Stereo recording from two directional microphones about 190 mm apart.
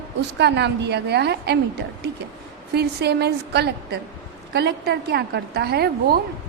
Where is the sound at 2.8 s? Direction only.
60° right (ahead or behind).